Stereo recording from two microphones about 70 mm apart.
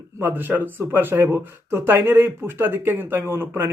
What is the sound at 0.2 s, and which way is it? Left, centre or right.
Speech, right.